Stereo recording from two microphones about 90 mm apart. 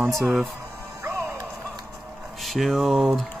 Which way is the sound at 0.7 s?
25° right (ahead or behind).